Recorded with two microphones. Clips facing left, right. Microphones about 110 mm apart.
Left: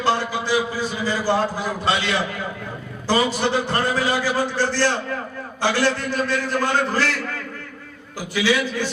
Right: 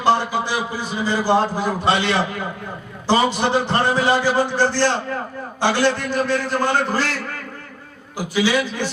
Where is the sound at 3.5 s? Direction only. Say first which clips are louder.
Right 3 dB; 20° right (ahead or behind).